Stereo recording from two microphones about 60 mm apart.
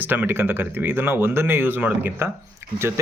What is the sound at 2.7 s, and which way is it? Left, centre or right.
Speech, right.